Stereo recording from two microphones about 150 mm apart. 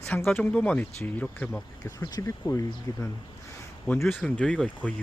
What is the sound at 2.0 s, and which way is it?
Speech, 20° left (ahead or behind).